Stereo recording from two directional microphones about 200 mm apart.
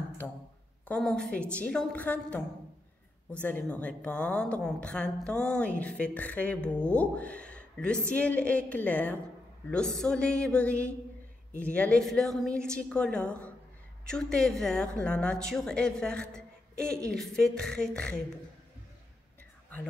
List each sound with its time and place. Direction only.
0.2 s a woman's voice: 5° left (ahead or behind)